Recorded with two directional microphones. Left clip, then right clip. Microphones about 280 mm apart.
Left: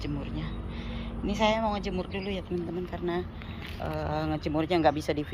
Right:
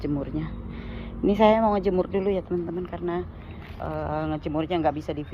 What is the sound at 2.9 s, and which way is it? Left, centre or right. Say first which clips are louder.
Speech: right 3 dB; centre.